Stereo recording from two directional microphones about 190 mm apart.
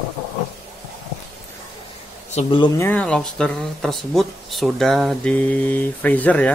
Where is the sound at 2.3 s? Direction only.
25° left (ahead or behind).